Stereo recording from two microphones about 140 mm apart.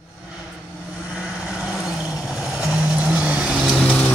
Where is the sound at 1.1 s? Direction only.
5° right (ahead or behind).